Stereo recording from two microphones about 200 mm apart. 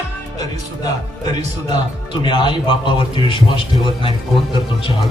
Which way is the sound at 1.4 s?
35° right (ahead or behind).